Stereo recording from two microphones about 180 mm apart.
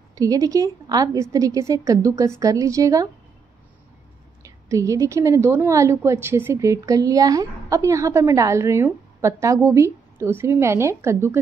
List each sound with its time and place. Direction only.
0.1 s a woman's voice: 20° right (ahead or behind)
4.4 s a woman's voice: 15° right (ahead or behind)